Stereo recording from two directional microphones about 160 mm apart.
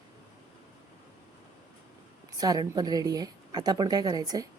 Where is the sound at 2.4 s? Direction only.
25° right (ahead or behind).